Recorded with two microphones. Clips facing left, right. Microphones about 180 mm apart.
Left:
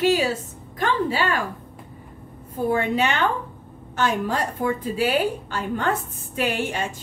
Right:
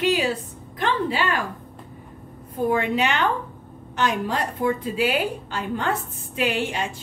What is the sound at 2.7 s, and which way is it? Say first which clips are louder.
Speech: left 1 dB; 35° left (ahead or behind).